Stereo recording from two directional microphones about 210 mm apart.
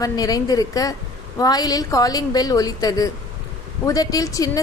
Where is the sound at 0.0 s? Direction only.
15° left (ahead or behind).